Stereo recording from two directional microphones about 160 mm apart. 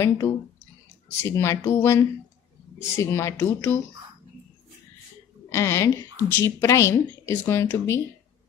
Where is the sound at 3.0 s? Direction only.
15° left (ahead or behind).